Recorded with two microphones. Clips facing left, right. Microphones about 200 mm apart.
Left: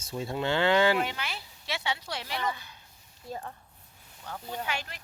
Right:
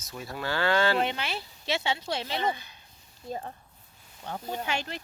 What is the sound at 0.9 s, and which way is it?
Speech, 25° right (ahead or behind).